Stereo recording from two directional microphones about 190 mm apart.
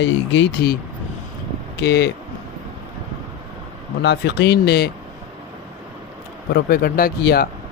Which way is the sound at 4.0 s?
65° left (ahead or behind).